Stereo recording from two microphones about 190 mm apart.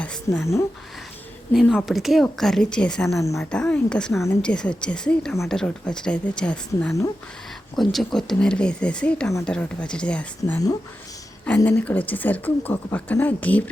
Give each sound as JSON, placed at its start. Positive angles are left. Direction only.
{"t": 0.0, "sound": "a sound", "side_deg": 5}
{"t": 1.5, "sound": "speech", "side_deg": 0}
{"t": 3.2, "sound": "speech", "side_deg": 15}
{"t": 3.5, "sound": "speech", "side_deg": 5}